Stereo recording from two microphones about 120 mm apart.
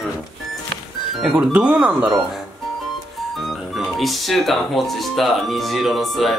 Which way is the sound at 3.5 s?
Centre (ahead or behind).